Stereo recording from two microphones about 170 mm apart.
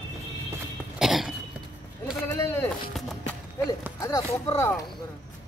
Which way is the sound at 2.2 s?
10° left (ahead or behind).